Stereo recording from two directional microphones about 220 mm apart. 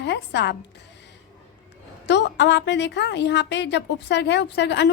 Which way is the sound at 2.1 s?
50° left (ahead or behind).